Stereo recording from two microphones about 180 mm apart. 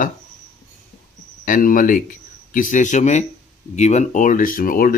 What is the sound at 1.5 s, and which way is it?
Speech, 50° left (ahead or behind).